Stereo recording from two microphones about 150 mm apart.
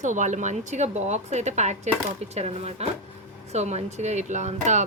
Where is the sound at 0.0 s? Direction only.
55° right (ahead or behind).